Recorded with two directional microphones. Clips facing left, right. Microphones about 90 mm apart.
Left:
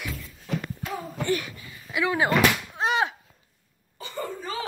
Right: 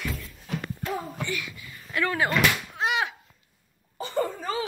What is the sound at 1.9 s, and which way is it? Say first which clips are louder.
Speech: left 2 dB; 15° left (ahead or behind).